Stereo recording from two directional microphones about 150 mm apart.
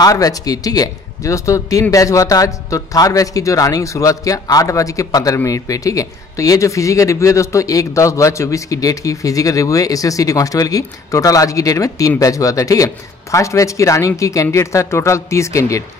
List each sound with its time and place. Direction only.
0.0 s speech: 25° left (ahead or behind)